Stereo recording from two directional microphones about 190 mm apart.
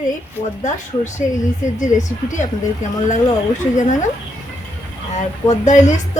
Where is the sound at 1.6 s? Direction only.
40° left (ahead or behind).